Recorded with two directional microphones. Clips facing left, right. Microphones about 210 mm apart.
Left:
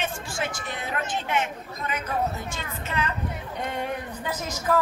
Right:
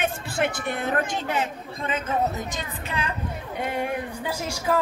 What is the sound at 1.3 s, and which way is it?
Speech, 30° right (ahead or behind).